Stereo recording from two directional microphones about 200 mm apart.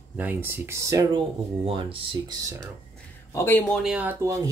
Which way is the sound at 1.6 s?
25° right (ahead or behind).